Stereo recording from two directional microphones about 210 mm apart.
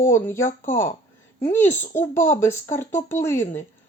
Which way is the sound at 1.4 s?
10° left (ahead or behind).